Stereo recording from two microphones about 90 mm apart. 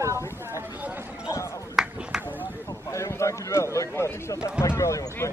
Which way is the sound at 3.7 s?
35° left (ahead or behind).